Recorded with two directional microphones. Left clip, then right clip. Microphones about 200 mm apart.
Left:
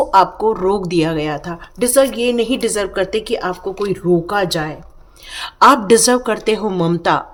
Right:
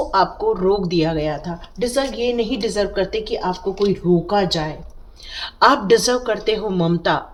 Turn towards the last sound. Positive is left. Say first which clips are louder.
# left 3 dB
turn(degrees=35)  # may be behind; listen again after turning